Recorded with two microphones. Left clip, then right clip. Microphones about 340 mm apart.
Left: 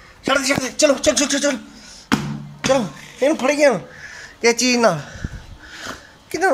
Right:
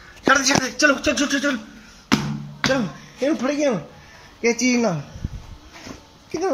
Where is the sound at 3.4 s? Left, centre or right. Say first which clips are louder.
Left 6 dB; left.